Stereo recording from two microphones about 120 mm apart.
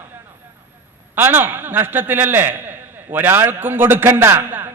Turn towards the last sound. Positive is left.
turn(degrees=-20)  # may be behind; listen again after turning